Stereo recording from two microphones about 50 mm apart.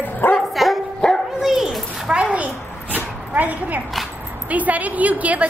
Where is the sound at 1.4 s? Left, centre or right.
Centre.